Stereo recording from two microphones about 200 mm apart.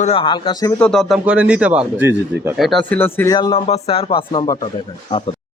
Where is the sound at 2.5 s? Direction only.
Centre (ahead or behind); by 3.6 s 20° left (ahead or behind).